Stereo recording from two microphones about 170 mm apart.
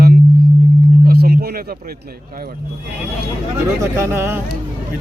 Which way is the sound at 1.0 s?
65° right (ahead or behind).